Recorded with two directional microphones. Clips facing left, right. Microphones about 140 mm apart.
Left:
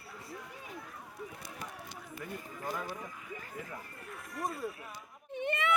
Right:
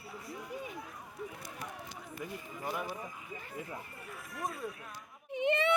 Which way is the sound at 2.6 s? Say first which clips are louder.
Right 1 dB; 10° right (ahead or behind).